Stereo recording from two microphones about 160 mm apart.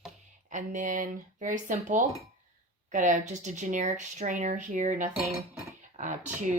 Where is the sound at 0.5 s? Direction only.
55° right (ahead or behind).